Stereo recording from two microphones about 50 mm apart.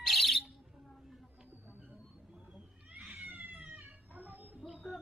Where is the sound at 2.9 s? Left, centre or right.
Right.